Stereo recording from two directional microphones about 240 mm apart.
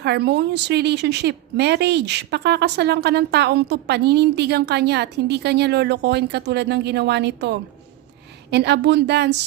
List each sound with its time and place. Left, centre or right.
0.0 s a woman's voice: right